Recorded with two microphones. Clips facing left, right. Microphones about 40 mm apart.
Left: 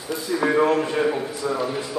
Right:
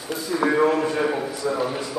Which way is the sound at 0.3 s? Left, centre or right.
Centre.